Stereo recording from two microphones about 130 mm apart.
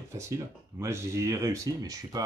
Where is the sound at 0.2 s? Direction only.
20° right (ahead or behind).